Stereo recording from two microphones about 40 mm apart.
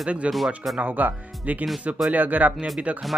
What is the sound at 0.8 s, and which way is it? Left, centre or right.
Speech, right.